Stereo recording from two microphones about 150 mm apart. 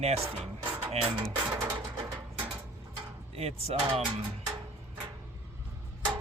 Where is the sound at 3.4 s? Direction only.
40° right (ahead or behind).